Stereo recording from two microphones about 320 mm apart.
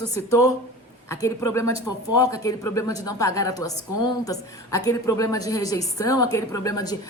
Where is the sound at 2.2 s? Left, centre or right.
Centre.